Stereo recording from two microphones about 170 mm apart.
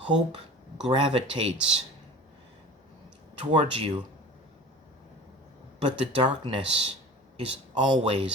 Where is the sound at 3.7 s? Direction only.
35° right (ahead or behind).